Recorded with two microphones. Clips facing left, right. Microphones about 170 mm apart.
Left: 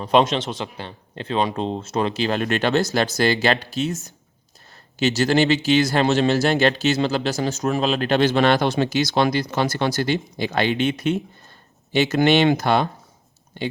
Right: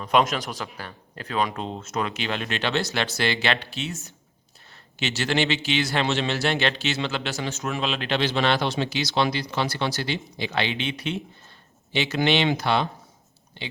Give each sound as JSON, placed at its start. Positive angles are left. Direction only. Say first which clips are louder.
{"t": 0.0, "sound": "speech", "louder": "left 4 dB", "side_deg": 30}